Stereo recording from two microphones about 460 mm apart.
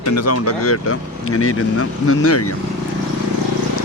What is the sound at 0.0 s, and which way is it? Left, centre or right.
Speech, left.